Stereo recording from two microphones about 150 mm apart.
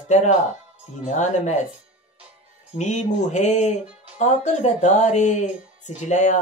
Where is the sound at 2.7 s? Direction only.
50° left (ahead or behind).